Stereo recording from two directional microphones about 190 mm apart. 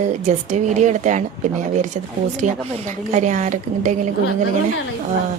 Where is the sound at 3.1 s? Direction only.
40° right (ahead or behind).